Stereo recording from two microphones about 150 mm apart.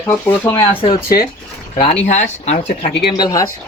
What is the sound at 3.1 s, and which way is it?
Speech, 25° left (ahead or behind).